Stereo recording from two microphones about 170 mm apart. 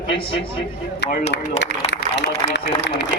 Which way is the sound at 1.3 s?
90° left.